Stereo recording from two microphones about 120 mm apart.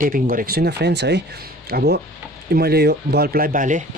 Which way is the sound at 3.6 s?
90° right.